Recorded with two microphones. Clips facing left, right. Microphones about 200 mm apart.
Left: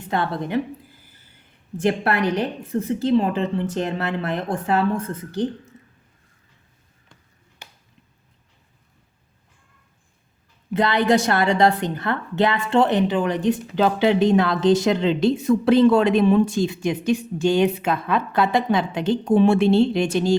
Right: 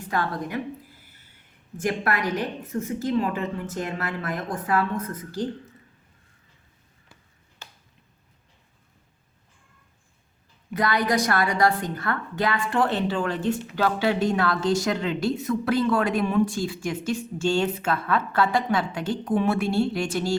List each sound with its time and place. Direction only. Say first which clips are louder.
0.0 s a woman's voice: left 3 dB; 25° left (ahead or behind)
1.8 s a woman's voice: left 5 dB; 30° left (ahead or behind)
7.6 s finger snapping: left 1 dB; 15° left (ahead or behind)
10.8 s a woman's voice: left 5 dB; 25° left (ahead or behind)